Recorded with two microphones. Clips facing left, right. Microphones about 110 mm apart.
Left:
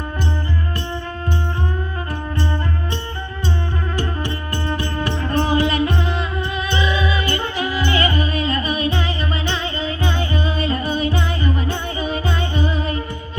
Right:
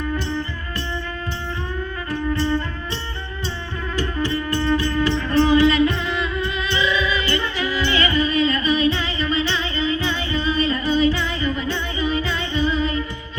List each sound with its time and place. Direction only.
3.9 s music: 50° left (ahead or behind)